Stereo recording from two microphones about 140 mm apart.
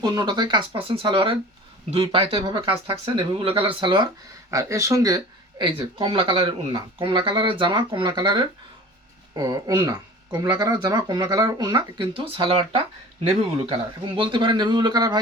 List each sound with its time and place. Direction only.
0.0 s speech: 25° right (ahead or behind)
4.5 s speech: 20° right (ahead or behind)
5.6 s speech: 35° right (ahead or behind)